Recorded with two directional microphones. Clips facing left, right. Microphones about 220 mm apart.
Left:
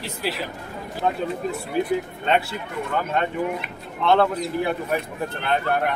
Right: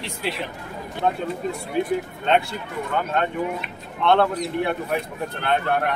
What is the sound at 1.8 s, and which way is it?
Speech, centre (ahead or behind).